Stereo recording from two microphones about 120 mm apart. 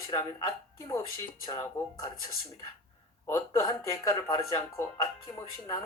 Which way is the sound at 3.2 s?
25° left (ahead or behind).